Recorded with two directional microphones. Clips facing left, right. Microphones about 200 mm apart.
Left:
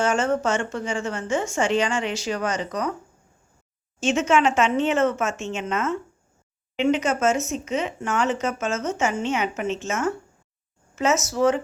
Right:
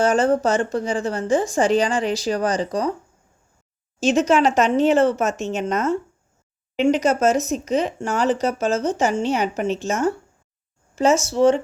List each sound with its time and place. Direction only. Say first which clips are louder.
0.0 s speech: right 4 dB; 35° right (ahead or behind)
4.0 s speech: right 3 dB; 35° right (ahead or behind)